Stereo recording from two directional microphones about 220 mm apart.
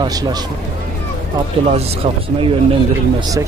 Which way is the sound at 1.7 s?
25° right (ahead or behind).